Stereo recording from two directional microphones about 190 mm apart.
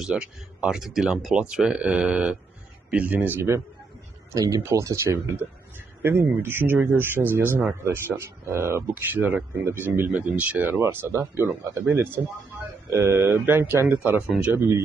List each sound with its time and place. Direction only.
0.0 s speech: 5° right (ahead or behind)